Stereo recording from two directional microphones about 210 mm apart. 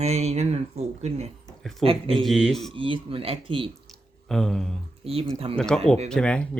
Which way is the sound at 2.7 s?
25° right (ahead or behind).